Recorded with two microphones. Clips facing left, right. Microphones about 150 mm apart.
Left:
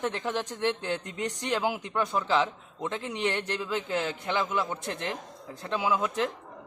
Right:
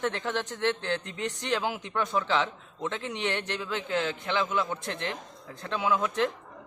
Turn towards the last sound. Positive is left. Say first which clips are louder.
# right 1 dB
turn(degrees=5)  # may be behind; listen again after turning